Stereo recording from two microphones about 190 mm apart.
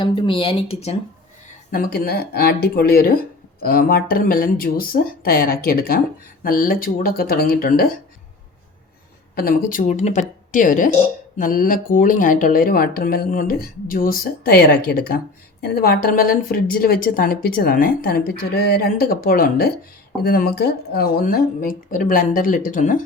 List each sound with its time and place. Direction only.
0.0 s speech: 25° left (ahead or behind)
1.7 s speech: 50° left (ahead or behind)
9.3 s speech: 50° left (ahead or behind)